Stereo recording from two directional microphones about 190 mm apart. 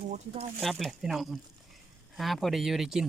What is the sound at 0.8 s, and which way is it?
Speech, centre (ahead or behind).